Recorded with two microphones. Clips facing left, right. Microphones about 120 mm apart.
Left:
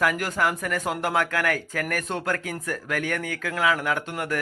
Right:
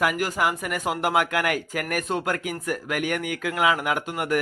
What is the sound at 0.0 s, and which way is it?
A man's voice, 10° right (ahead or behind).